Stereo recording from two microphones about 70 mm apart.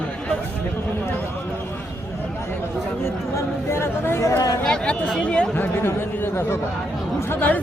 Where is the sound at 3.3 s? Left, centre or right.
Left.